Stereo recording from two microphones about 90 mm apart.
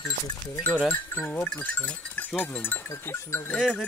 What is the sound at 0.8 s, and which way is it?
Speech, 25° left (ahead or behind).